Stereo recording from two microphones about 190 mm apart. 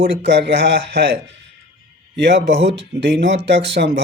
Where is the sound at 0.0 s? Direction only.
60° right (ahead or behind).